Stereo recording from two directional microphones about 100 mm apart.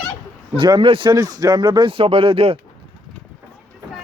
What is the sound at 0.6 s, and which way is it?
Speech, 60° right (ahead or behind).